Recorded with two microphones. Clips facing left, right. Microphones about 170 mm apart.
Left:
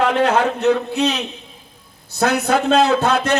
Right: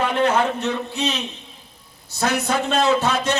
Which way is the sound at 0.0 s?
70° left (ahead or behind).